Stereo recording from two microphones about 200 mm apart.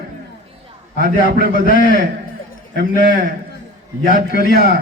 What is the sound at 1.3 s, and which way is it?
Speech, 50° right (ahead or behind).